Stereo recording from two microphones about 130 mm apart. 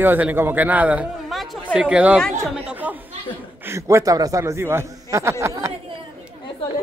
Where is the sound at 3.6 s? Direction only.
20° right (ahead or behind).